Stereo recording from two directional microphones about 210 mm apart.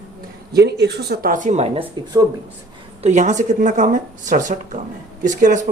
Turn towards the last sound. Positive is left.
turn(degrees=-35)  # may be behind; listen again after turning